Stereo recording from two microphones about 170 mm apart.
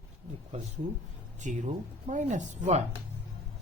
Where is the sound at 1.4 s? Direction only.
45° right (ahead or behind).